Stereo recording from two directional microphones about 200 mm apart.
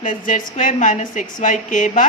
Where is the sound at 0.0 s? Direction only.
40° left (ahead or behind).